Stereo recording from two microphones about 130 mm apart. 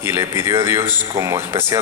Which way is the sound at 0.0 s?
20° right (ahead or behind).